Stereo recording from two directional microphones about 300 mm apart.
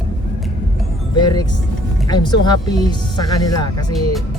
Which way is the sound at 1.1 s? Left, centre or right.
Centre.